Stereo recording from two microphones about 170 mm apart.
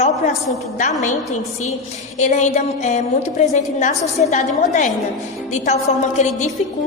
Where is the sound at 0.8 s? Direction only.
45° left (ahead or behind).